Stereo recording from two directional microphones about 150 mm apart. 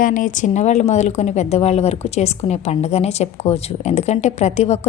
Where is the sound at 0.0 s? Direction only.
60° left (ahead or behind).